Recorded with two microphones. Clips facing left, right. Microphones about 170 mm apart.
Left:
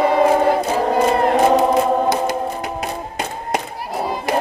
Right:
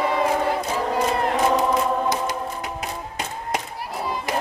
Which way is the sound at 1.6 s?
65° left (ahead or behind).